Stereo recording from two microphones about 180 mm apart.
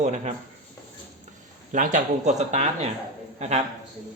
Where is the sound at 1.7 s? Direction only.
45° right (ahead or behind).